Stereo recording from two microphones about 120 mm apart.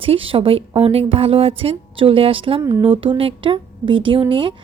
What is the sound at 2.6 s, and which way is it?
Speech, 25° right (ahead or behind).